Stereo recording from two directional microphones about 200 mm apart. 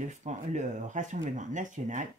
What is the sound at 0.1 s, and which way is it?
A woman's voice, 35° right (ahead or behind).